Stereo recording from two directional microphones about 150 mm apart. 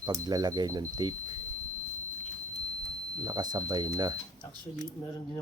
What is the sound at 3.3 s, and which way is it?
Speech, 25° right (ahead or behind).